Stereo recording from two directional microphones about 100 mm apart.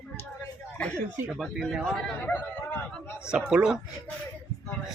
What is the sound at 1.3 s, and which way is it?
Speech, centre (ahead or behind).